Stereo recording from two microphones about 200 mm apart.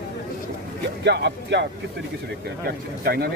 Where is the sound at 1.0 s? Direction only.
60° right (ahead or behind).